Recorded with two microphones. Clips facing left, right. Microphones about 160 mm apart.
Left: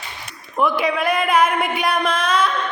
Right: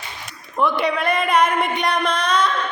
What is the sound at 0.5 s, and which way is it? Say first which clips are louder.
Speech: left 1 dB; 5° left (ahead or behind).